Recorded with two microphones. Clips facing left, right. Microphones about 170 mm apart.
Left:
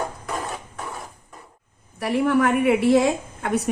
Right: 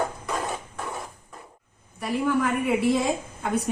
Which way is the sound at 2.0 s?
70° left (ahead or behind).